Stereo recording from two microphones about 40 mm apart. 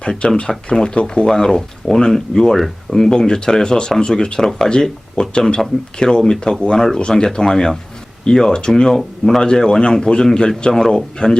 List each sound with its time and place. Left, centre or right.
0.0 s a man's voice: left
1.3 s speech: centre
9.0 s speech: centre
9.4 s a man's voice: centre